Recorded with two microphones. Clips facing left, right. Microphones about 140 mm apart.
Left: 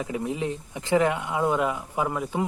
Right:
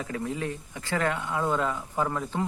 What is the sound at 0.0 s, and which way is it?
A man's voice, 15° left (ahead or behind).